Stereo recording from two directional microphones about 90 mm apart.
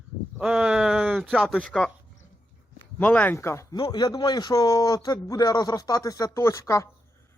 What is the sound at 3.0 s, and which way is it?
Speech, 15° left (ahead or behind).